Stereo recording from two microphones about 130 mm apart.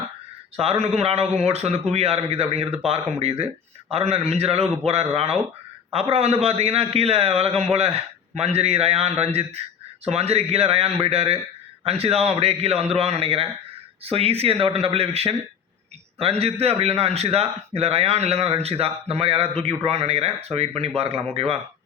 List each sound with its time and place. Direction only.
0.6 s a man's voice: 55° right (ahead or behind)